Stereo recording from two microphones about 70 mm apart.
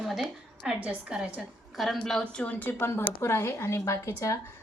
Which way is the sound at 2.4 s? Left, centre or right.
Left.